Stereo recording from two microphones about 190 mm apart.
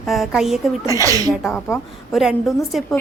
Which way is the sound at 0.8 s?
15° right (ahead or behind).